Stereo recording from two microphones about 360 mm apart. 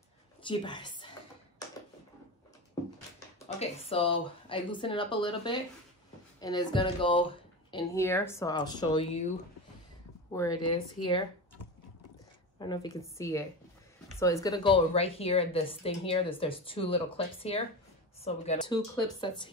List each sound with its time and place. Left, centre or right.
0.5 s a woman's voice: centre
3.9 s a woman's voice: centre
10.3 s a woman's voice: centre
12.5 s a woman's voice: centre